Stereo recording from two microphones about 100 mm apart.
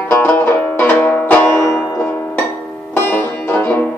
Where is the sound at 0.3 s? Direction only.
15° left (ahead or behind).